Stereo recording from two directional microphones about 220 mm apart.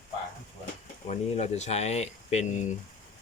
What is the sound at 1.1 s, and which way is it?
Speech, 30° left (ahead or behind).